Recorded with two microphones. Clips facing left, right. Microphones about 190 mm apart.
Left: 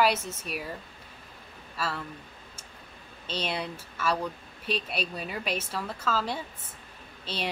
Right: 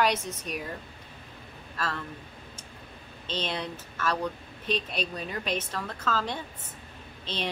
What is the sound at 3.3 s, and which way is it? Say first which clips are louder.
A woman's voice: even; 10° left (ahead or behind).